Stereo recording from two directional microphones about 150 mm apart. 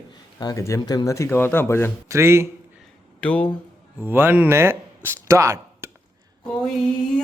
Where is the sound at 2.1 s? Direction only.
20° right (ahead or behind).